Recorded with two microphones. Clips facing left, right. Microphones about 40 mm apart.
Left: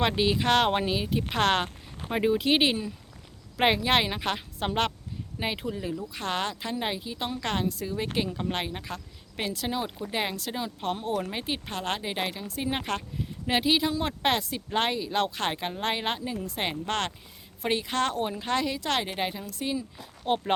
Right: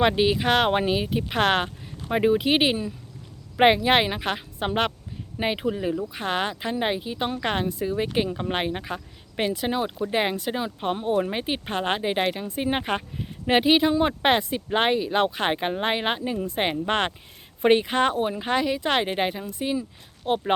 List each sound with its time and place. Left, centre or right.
0.0 s a woman's voice: centre
17.6 s speech: right
17.8 s a woman's voice: centre
20.2 s speech: centre